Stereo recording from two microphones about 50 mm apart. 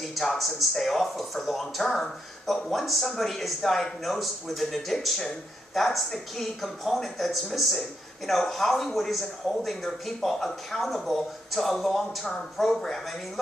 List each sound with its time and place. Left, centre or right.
0.0 s speech: centre